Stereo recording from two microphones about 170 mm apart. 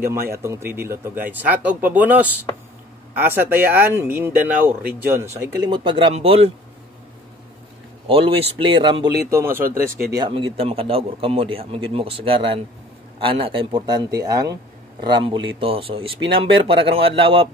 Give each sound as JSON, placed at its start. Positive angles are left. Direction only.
{"t": 0.4, "sound": "speech", "side_deg": -15}
{"t": 8.1, "sound": "speech", "side_deg": -30}
{"t": 9.2, "sound": "speech", "side_deg": -15}
{"t": 10.1, "sound": "speech", "side_deg": -25}